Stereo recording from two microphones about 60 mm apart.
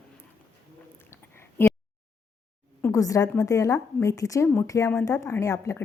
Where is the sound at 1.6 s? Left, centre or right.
Left.